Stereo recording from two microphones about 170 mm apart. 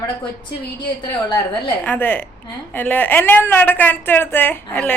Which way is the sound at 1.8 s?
10° left (ahead or behind).